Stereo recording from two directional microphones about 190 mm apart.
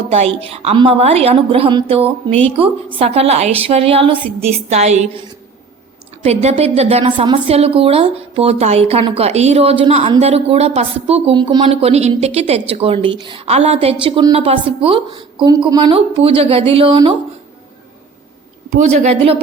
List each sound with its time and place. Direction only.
0.1 s a woman's voice: 30° right (ahead or behind)
6.2 s a woman's voice: 35° right (ahead or behind)
18.9 s a woman's voice: 30° right (ahead or behind)